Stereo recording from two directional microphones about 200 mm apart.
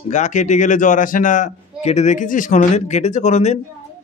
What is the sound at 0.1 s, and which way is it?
A man's voice, 35° left (ahead or behind).